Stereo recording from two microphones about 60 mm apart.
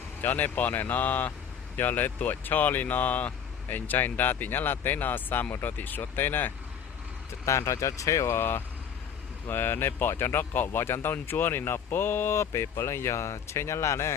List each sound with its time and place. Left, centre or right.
0.2 s speech: left
7.4 s speech: left
8.3 s speech: left
12.5 s speech: left